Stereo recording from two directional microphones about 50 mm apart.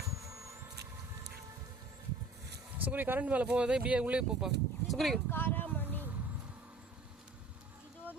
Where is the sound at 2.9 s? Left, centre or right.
Right.